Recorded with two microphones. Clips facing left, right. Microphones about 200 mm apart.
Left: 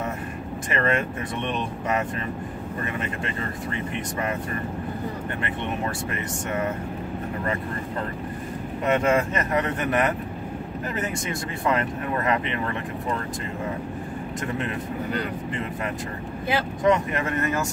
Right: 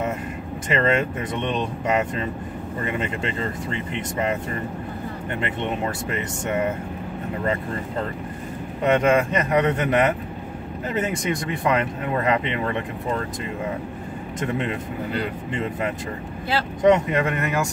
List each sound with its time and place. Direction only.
0.7 s speech: 20° right (ahead or behind)
8.8 s speech: 20° right (ahead or behind)
14.4 s speech: 20° right (ahead or behind)
16.8 s speech: 20° right (ahead or behind)